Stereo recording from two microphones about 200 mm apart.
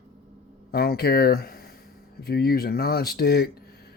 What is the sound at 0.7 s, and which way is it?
Speech, 50° left (ahead or behind).